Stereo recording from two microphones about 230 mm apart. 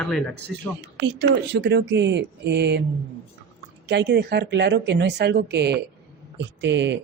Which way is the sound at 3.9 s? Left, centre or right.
Right.